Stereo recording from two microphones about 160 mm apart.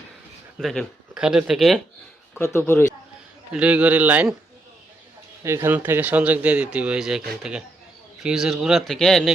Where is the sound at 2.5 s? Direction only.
15° left (ahead or behind).